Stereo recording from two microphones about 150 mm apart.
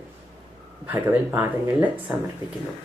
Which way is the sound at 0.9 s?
15° right (ahead or behind).